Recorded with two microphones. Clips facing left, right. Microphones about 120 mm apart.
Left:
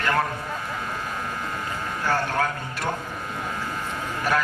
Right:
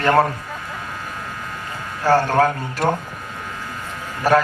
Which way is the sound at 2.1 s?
40° right (ahead or behind).